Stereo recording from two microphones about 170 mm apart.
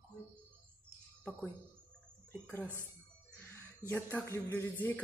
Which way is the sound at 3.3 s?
10° left (ahead or behind).